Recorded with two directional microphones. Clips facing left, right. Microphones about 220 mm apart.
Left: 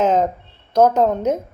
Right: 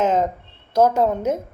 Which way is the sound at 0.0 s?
40° left (ahead or behind).